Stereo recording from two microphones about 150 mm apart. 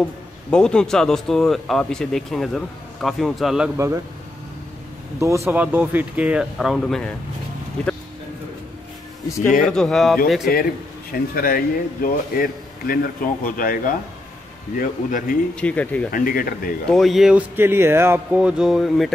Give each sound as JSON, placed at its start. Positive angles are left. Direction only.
{"t": 0.5, "sound": "speech", "side_deg": 5}
{"t": 3.7, "sound": "a man's voice", "side_deg": -20}
{"t": 5.2, "sound": "speech", "side_deg": -20}
{"t": 9.7, "sound": "speech", "side_deg": 5}
{"t": 10.5, "sound": "speech", "side_deg": 80}
{"t": 15.6, "sound": "speech", "side_deg": 10}
{"t": 16.1, "sound": "speech", "side_deg": 70}
{"t": 16.8, "sound": "speech", "side_deg": 0}